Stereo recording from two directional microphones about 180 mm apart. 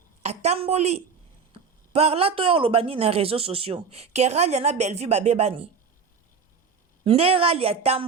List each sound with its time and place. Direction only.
0.2 s a woman's voice: 35° right (ahead or behind)
7.0 s a man's voice: 30° right (ahead or behind)